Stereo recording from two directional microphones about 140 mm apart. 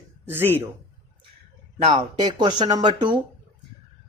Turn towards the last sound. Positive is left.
turn(degrees=-35)  # may be behind; listen again after turning